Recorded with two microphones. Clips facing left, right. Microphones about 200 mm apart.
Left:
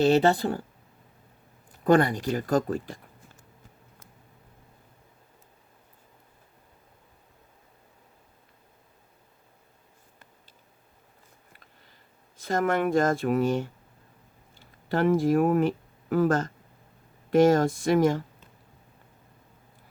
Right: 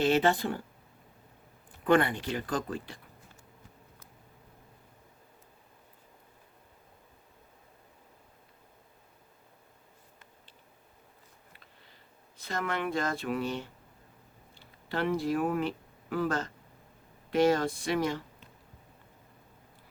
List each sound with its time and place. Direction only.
0.0 s speech: 40° left (ahead or behind)
1.8 s speech: 40° left (ahead or behind)
12.4 s speech: 45° left (ahead or behind)